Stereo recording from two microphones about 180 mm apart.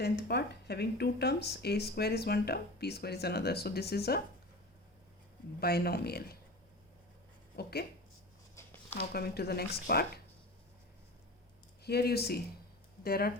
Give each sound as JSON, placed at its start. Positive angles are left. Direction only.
{"t": 0.0, "sound": "speech", "side_deg": 65}
{"t": 5.5, "sound": "speech", "side_deg": 60}
{"t": 7.5, "sound": "speech", "side_deg": 60}
{"t": 8.5, "sound": "a sound", "side_deg": 10}
{"t": 9.0, "sound": "speech", "side_deg": 60}
{"t": 11.8, "sound": "speech", "side_deg": 60}